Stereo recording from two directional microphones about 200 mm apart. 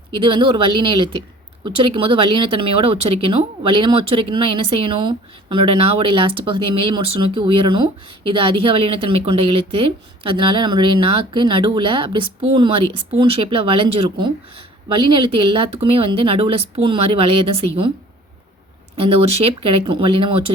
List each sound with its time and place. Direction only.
0.2 s speech: 25° right (ahead or behind)
18.9 s speech: 30° right (ahead or behind)